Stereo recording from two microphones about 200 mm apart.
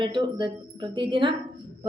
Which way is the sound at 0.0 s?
25° right (ahead or behind).